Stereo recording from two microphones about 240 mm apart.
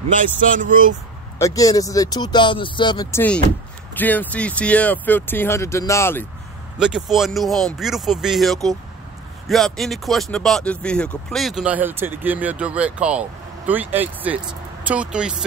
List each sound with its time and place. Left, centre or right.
0.1 s speech: right
1.4 s speech: centre
6.8 s speech: centre